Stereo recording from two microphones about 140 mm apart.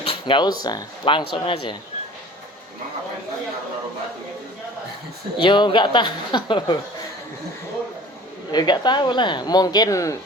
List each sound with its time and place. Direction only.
0.0 s speech: 40° left (ahead or behind)
5.4 s speech: 35° left (ahead or behind)
8.5 s speech: 30° left (ahead or behind)